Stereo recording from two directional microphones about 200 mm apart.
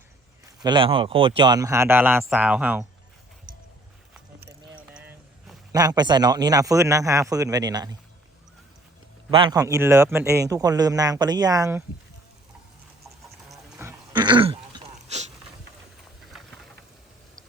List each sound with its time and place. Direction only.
0.6 s a man's voice: 25° right (ahead or behind); by 2.8 s 10° right (ahead or behind)
5.7 s a man's voice: 20° right (ahead or behind)
9.3 s a man's voice: 20° right (ahead or behind)
13.5 s a sound: 15° right (ahead or behind); by 15.3 s 35° right (ahead or behind)